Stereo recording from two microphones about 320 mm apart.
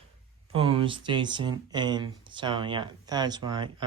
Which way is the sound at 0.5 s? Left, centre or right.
Centre.